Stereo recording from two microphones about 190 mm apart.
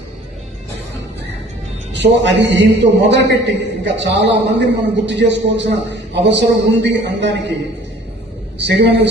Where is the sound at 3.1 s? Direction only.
65° right (ahead or behind).